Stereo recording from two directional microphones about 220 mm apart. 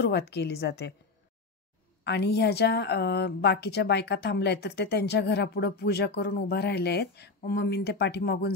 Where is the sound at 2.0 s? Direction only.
50° left (ahead or behind).